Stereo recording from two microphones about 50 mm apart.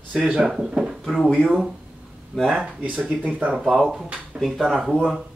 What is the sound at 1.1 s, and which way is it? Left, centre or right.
Speech, centre.